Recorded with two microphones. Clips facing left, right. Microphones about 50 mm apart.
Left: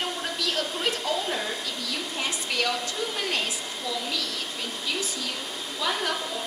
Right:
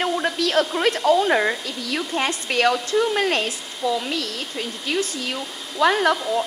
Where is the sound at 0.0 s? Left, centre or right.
Right.